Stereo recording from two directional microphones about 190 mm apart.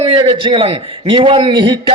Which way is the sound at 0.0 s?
30° right (ahead or behind).